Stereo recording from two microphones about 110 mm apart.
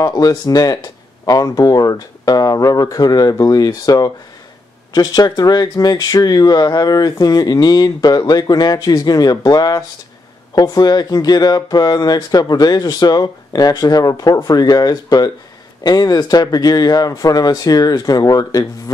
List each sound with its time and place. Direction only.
0.0 s speech: 40° left (ahead or behind)